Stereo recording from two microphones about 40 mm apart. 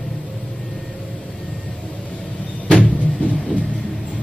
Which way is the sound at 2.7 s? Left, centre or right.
Left.